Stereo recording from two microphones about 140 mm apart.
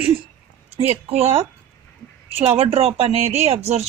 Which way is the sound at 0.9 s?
45° right (ahead or behind).